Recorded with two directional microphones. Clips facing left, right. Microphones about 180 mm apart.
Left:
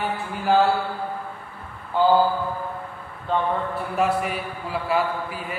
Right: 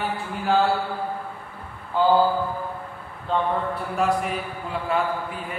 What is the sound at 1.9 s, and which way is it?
Speech, centre (ahead or behind).